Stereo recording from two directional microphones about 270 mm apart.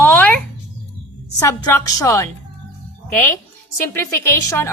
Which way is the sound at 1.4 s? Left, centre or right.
Centre.